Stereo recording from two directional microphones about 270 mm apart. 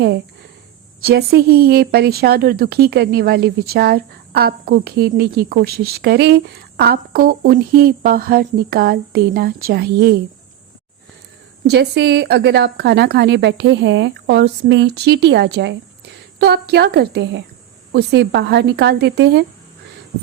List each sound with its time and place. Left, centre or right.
1.0 s speech: right
11.6 s speech: right